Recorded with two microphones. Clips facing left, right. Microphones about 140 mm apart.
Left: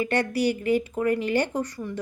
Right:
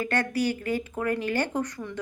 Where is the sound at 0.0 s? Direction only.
15° left (ahead or behind).